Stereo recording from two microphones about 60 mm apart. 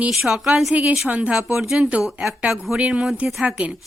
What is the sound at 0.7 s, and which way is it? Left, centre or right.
Speech, right.